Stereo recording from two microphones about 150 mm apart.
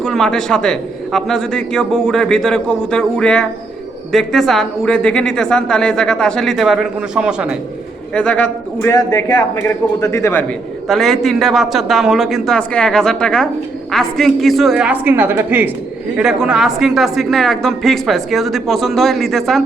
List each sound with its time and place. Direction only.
0.0 s speech: 5° left (ahead or behind)
8.1 s a man's voice: 10° left (ahead or behind)
10.8 s speech: centre (ahead or behind)